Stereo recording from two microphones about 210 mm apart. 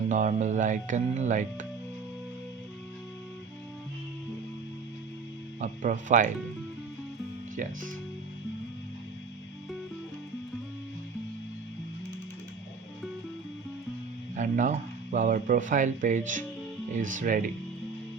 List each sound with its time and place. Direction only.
0.1 s speech: 35° right (ahead or behind)
5.5 s speech: 35° right (ahead or behind)
7.5 s speech: 40° right (ahead or behind)
14.3 s speech: 35° right (ahead or behind)